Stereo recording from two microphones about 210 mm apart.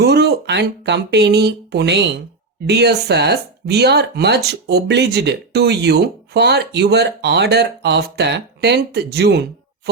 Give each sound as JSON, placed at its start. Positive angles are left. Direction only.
{"t": 0.0, "sound": "speech", "side_deg": -50}